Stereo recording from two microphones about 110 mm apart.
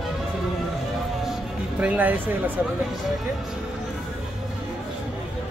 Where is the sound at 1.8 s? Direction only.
15° right (ahead or behind).